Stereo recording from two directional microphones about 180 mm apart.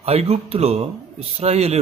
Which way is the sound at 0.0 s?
35° right (ahead or behind).